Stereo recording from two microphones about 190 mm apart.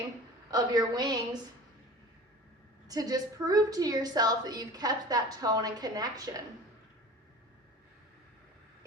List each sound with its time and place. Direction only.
0.5 s a woman's voice: 20° right (ahead or behind)
2.8 s a woman's voice: 20° right (ahead or behind)